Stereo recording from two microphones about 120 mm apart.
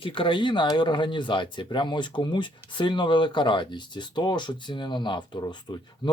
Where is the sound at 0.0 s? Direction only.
45° left (ahead or behind).